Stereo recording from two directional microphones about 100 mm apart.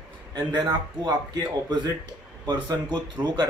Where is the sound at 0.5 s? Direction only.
45° right (ahead or behind).